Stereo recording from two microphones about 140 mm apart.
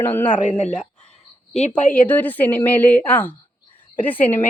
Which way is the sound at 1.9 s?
10° left (ahead or behind).